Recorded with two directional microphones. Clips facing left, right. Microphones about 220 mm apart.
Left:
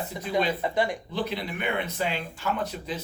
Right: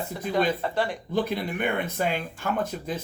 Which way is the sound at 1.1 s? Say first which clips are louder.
Right 8 dB; 50° right (ahead or behind).